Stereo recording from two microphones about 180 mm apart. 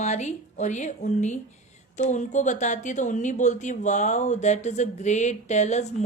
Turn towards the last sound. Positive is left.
turn(degrees=40)  # may be behind; listen again after turning